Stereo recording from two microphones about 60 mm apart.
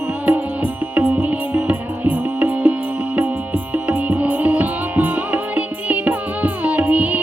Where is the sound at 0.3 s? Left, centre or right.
Right.